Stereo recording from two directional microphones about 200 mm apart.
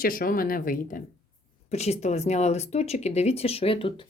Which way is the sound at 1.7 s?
35° left (ahead or behind).